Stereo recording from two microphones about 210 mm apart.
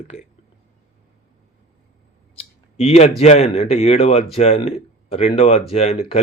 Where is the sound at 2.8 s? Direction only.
30° left (ahead or behind).